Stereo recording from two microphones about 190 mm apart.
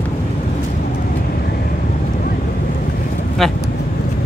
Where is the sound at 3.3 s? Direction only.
Centre (ahead or behind).